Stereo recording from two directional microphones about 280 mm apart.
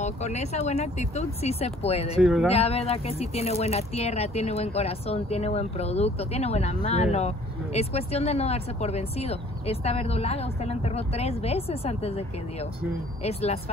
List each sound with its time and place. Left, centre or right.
0.0 s speech: left